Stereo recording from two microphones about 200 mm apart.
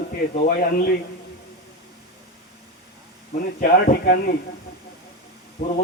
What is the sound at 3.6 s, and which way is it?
Speech, 50° left (ahead or behind).